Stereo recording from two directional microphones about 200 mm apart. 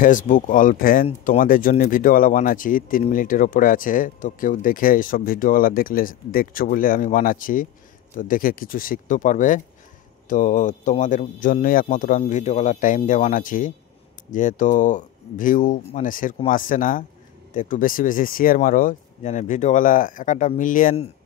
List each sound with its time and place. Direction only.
0.0 s speech: 40° left (ahead or behind)